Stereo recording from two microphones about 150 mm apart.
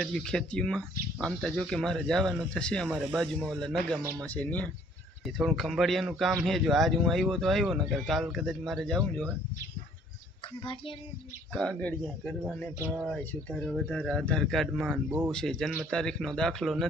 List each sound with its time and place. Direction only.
0.0 s a man's voice: 5° left (ahead or behind)
10.4 s child singing: 35° left (ahead or behind)
11.5 s a man's voice: 5° left (ahead or behind); by 15.3 s 10° right (ahead or behind)
15.3 s a man's voice: 5° left (ahead or behind)